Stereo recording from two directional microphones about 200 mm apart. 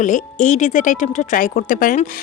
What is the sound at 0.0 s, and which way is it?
Speech, 40° left (ahead or behind).